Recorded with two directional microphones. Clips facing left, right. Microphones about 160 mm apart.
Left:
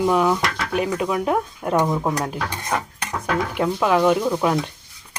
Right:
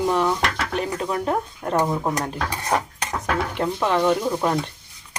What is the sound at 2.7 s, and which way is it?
Cutlery, 35° right (ahead or behind).